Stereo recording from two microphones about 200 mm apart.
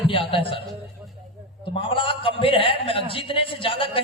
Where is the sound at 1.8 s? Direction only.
25° left (ahead or behind).